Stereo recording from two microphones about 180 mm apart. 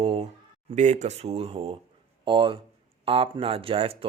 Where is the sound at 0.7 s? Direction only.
40° right (ahead or behind).